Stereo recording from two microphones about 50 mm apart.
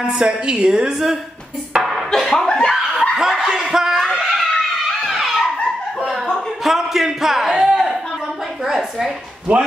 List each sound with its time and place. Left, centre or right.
0.1 s speech: centre
1.8 s music: centre
2.1 s speech: centre
3.0 s speech: centre
4.2 s a sound: centre
5.0 s dog: centre
6.6 s speech: centre
9.5 s a man's voice: right